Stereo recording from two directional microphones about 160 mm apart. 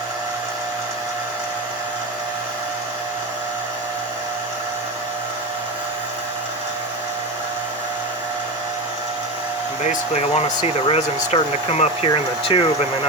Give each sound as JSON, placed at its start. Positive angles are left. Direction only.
{"t": 9.8, "sound": "speech", "side_deg": 45}